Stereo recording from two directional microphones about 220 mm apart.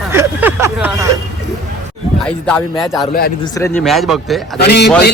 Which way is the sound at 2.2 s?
5° left (ahead or behind).